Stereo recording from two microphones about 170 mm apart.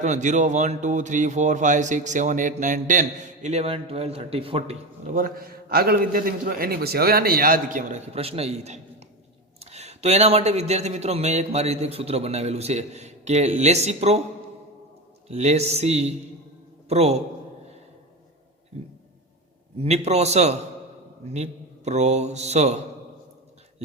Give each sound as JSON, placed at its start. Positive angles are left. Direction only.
{"t": 0.0, "sound": "a man's voice", "side_deg": -45}
{"t": 15.3, "sound": "a man's voice", "side_deg": -40}
{"t": 19.8, "sound": "a man's voice", "side_deg": -40}